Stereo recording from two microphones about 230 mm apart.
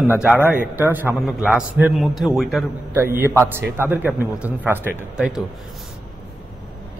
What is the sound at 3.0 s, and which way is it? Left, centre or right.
A man's voice, centre.